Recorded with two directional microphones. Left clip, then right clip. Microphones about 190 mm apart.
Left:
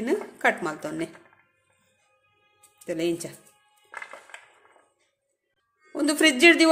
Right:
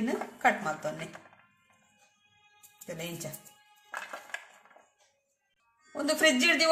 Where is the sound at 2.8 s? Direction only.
50° left (ahead or behind).